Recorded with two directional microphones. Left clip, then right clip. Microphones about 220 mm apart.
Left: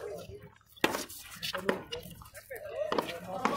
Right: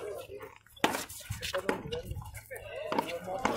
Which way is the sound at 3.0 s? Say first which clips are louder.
Right 3 dB; 20° left (ahead or behind).